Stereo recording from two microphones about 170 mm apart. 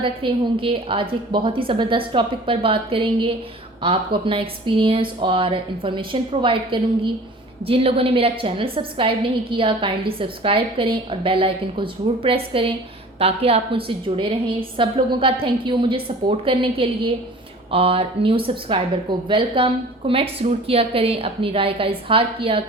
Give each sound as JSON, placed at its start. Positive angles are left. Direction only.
{"t": 0.0, "sound": "a woman's voice", "side_deg": -30}